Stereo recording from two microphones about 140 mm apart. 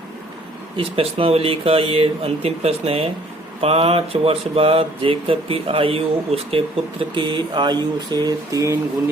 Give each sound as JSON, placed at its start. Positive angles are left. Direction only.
{"t": 0.8, "sound": "speech", "side_deg": -40}